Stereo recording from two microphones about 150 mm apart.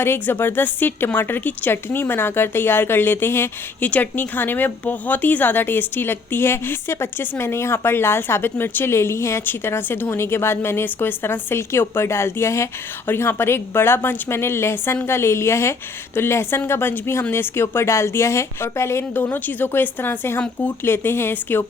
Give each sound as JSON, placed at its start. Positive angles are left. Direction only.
{"t": 0.0, "sound": "speech", "side_deg": 15}